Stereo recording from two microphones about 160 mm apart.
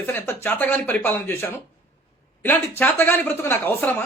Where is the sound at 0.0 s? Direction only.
15° left (ahead or behind).